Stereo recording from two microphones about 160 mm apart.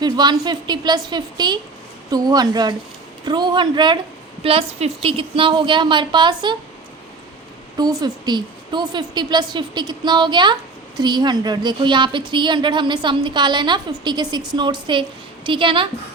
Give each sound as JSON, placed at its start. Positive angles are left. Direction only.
{"t": 0.0, "sound": "a woman's voice", "side_deg": -25}
{"t": 7.8, "sound": "a woman's voice", "side_deg": -25}